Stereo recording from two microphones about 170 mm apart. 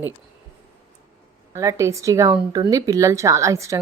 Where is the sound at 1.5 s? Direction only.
15° right (ahead or behind).